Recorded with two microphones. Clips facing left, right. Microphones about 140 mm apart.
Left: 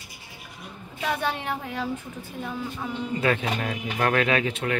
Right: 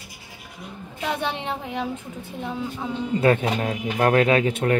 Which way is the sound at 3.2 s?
35° right (ahead or behind).